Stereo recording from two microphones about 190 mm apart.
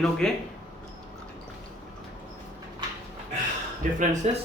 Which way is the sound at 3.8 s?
40° right (ahead or behind).